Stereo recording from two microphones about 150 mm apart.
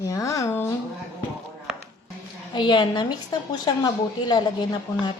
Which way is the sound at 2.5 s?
30° left (ahead or behind).